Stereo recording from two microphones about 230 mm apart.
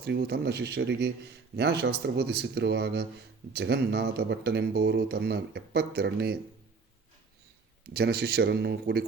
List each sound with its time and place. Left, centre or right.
0.0 s a man's voice: right
7.9 s a man's voice: right